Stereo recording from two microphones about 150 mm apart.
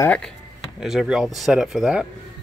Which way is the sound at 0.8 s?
5° right (ahead or behind).